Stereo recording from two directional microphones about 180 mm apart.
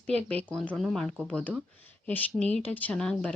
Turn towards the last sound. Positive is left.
turn(degrees=5)  # may be behind; listen again after turning